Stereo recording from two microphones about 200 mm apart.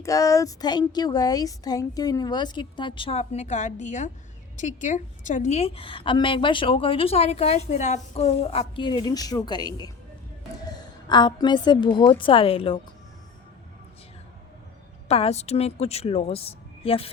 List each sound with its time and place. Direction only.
0.0 s a woman's voice: 15° left (ahead or behind)
11.1 s a woman's voice: 20° left (ahead or behind)
15.0 s a woman's voice: 30° left (ahead or behind)